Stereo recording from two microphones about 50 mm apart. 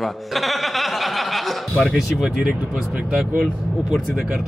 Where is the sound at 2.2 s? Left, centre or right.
Right.